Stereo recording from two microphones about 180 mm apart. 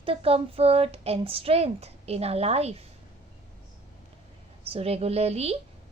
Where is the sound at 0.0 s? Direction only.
30° right (ahead or behind).